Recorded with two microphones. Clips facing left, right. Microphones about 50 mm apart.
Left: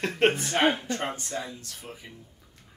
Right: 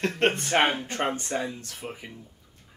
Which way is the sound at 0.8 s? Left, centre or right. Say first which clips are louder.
Right 3 dB; right.